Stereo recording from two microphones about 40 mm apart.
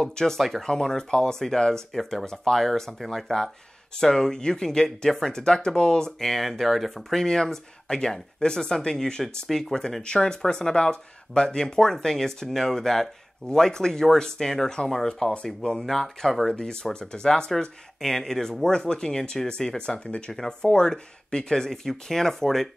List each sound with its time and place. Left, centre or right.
0.0 s speech: centre
0.4 s speech: centre
0.7 s speech: centre
2.0 s speech: centre
7.1 s speech: centre
15.8 s speech: centre
16.4 s speech: centre